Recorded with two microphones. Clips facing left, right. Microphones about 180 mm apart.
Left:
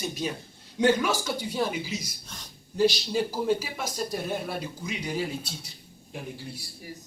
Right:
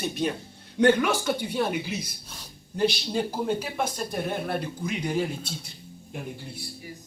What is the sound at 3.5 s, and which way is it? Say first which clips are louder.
Speech: even; 55° right (ahead or behind).